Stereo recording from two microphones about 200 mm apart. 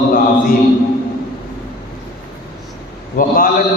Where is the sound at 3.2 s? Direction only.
45° left (ahead or behind).